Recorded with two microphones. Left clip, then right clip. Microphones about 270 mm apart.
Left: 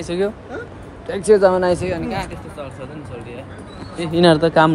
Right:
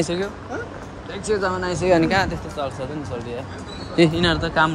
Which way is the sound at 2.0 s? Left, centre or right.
Right.